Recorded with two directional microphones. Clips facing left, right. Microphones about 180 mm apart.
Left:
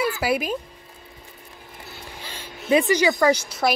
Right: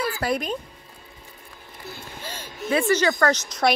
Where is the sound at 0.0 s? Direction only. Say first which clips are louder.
Left 2 dB; 5° left (ahead or behind).